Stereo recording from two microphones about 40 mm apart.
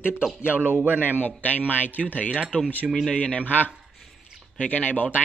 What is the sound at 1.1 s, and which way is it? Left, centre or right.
Speech, left.